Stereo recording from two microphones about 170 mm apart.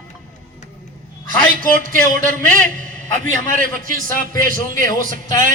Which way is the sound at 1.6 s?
50° right (ahead or behind).